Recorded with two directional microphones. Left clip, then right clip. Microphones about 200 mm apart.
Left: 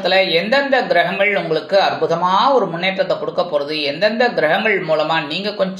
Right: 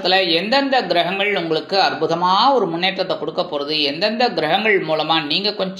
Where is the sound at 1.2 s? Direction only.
30° right (ahead or behind).